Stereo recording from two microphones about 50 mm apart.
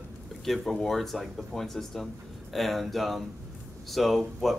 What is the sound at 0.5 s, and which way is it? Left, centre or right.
Speech, centre.